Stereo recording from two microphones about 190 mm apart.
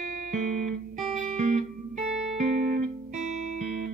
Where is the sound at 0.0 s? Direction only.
40° right (ahead or behind).